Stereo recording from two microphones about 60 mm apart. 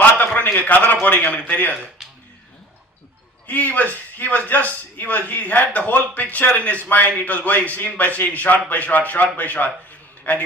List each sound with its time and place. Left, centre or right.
0.0 s a sound: left
1.0 s a man's voice: left
3.4 s a man's voice: left